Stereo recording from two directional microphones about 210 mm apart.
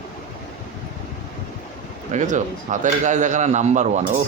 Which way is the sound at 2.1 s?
35° right (ahead or behind).